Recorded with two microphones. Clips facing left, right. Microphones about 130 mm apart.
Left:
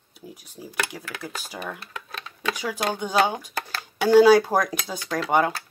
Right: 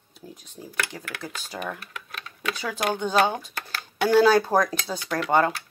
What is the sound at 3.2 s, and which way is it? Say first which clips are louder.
Speech: even; 15° left (ahead or behind).